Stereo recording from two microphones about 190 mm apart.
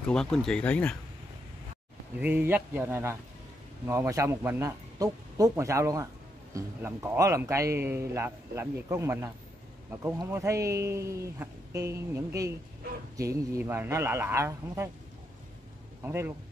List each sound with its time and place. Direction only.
0.1 s speech: 5° left (ahead or behind)
2.1 s a man's voice: 10° right (ahead or behind)
16.0 s a man's voice: 10° right (ahead or behind)